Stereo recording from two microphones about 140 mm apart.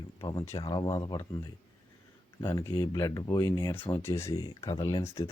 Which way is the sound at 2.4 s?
25° left (ahead or behind).